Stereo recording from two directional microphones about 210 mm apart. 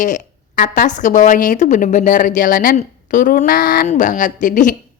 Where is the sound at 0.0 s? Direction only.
40° left (ahead or behind).